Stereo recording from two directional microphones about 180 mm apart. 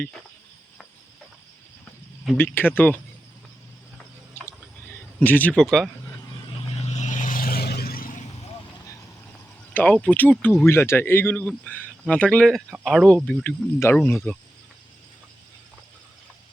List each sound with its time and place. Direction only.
2.4 s speech: 10° left (ahead or behind)
5.2 s speech: 10° left (ahead or behind)
6.7 s vehicle: 35° left (ahead or behind)
9.7 s speech: 5° left (ahead or behind)